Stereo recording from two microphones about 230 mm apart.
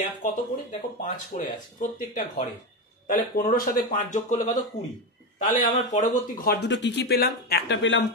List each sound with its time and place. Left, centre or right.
0.2 s speech: left